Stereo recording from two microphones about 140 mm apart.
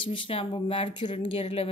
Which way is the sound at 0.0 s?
40° left (ahead or behind).